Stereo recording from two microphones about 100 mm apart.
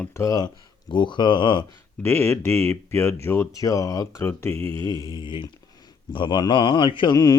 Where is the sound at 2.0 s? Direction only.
25° left (ahead or behind).